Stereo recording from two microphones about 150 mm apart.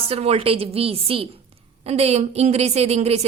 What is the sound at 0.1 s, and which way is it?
A woman's voice, 40° right (ahead or behind).